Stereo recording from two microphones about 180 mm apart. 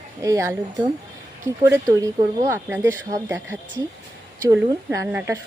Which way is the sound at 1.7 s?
15° right (ahead or behind).